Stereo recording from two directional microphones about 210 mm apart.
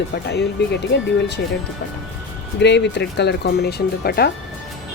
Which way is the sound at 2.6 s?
55° left (ahead or behind).